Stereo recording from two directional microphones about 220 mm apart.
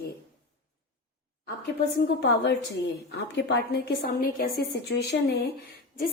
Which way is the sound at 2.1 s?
50° left (ahead or behind).